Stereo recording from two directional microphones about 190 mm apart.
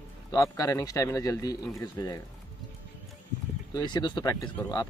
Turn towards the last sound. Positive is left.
turn(degrees=20)  # may be behind; listen again after turning